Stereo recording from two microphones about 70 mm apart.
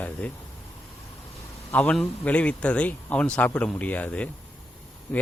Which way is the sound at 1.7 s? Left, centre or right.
Left.